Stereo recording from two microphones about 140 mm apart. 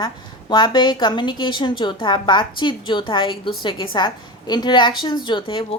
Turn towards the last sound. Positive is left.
turn(degrees=35)  # may be behind; listen again after turning